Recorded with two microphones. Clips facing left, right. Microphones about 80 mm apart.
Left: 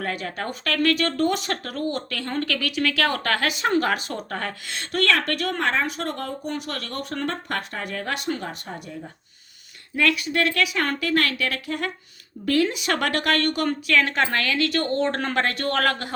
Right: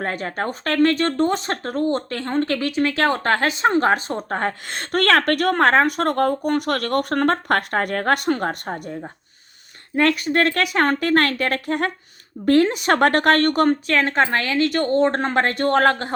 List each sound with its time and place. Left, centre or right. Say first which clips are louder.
0.0 s a woman's voice: right 4 dB; right